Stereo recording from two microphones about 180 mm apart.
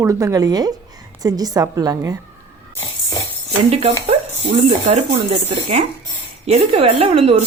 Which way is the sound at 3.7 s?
35° right (ahead or behind).